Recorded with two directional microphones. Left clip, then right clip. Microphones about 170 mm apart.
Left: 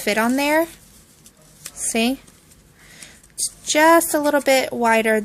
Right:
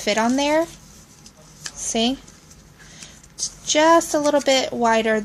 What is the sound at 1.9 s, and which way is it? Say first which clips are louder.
Speech: left 1 dB; 35° left (ahead or behind).